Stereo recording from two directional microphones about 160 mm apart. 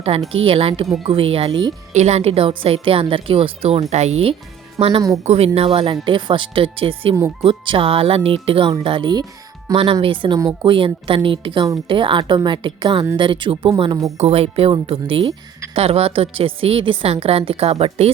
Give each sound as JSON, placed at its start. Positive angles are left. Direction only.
{"t": 0.4, "sound": "a woman's voice", "side_deg": -35}
{"t": 1.9, "sound": "a woman's voice", "side_deg": -45}